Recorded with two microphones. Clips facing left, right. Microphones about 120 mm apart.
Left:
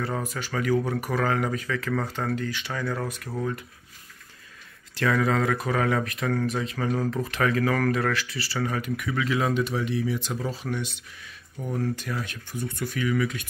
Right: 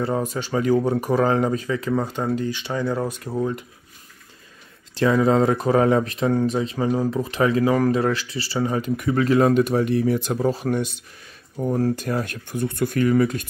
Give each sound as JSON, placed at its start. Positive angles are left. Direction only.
{"t": 0.0, "sound": "speech", "side_deg": -25}
{"t": 4.9, "sound": "speech", "side_deg": -25}
{"t": 11.5, "sound": "speech", "side_deg": -40}
{"t": 12.2, "sound": "speech", "side_deg": -55}